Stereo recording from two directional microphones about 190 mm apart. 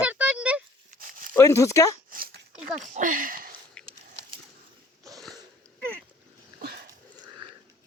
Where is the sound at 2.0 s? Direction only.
50° right (ahead or behind).